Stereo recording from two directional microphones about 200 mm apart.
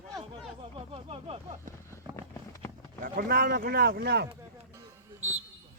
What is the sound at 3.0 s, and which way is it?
Speech, 45° right (ahead or behind).